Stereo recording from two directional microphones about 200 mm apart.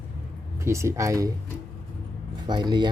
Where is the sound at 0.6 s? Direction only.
15° right (ahead or behind).